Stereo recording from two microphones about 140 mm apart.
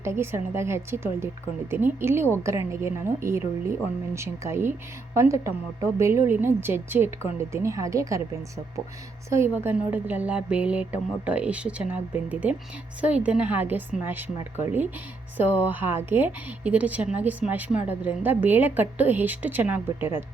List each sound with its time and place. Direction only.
0.0 s a woman's voice: 20° right (ahead or behind)